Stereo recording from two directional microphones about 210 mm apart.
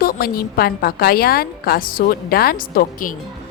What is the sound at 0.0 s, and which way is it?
A woman's voice, 45° left (ahead or behind).